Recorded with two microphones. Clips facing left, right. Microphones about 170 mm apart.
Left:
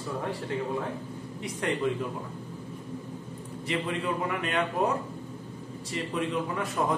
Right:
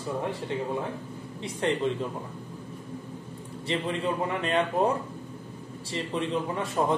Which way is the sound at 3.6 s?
30° right (ahead or behind).